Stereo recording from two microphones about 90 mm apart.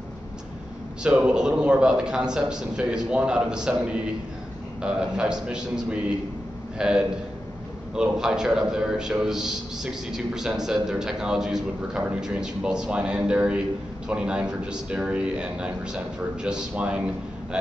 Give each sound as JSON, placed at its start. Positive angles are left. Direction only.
{"t": 1.0, "sound": "a man's voice", "side_deg": -10}